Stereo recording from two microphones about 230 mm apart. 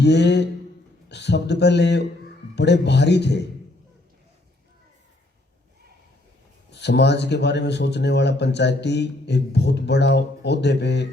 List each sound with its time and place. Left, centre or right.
0.0 s speech: left
6.7 s speech: left